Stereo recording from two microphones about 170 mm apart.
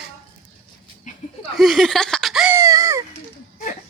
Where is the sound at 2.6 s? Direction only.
20° right (ahead or behind).